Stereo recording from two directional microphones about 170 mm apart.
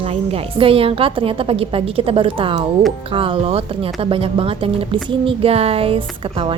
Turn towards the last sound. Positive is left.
turn(degrees=-35)  # may be behind; listen again after turning